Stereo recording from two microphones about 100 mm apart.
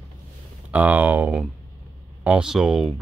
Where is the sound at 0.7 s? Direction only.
15° right (ahead or behind).